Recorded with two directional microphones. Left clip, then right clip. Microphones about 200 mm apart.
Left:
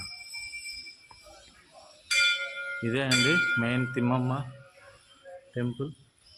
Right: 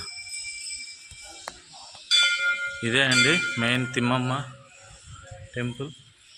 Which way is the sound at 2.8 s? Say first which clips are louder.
Right 5 dB; centre (ahead or behind).